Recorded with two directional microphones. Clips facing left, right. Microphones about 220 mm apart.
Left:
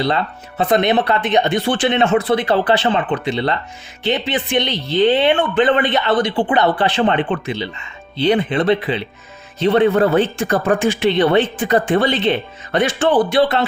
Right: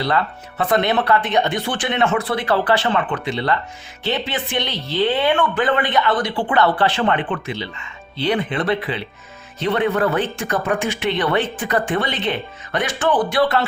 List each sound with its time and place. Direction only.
0.0 s speech: 25° left (ahead or behind)